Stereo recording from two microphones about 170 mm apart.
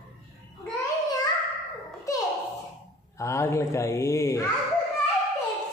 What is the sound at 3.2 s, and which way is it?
Speech, 15° left (ahead or behind).